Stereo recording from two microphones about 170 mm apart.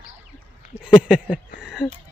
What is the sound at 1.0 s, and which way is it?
Speech, 5° right (ahead or behind).